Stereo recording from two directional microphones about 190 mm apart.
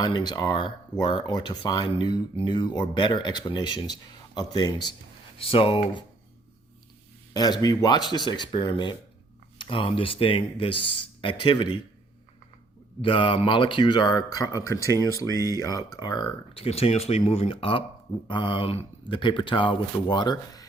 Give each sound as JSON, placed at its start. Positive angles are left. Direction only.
{"t": 0.0, "sound": "speech", "side_deg": 20}
{"t": 7.3, "sound": "speech", "side_deg": 20}
{"t": 13.0, "sound": "speech", "side_deg": 25}